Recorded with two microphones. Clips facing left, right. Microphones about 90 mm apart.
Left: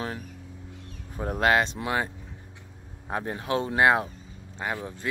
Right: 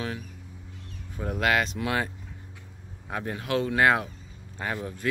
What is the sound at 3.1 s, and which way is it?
Speech, 30° left (ahead or behind).